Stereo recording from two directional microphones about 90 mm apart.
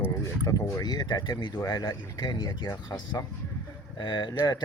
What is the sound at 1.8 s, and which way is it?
Speech, 35° left (ahead or behind).